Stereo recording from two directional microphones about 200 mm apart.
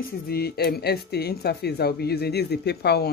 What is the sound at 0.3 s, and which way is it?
Speech, 50° left (ahead or behind).